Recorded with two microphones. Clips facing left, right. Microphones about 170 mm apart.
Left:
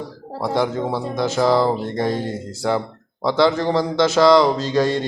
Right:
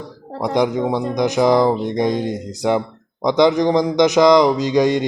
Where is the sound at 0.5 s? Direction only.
15° right (ahead or behind).